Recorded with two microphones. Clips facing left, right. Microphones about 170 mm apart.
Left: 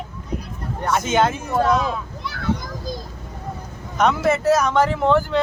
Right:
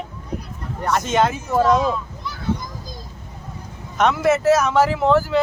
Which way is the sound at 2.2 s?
70° left (ahead or behind).